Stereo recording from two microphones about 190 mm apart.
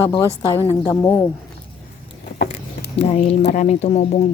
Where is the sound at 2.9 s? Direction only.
30° left (ahead or behind).